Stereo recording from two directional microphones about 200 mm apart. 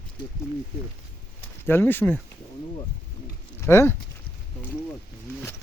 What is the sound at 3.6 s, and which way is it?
Speech, 10° left (ahead or behind).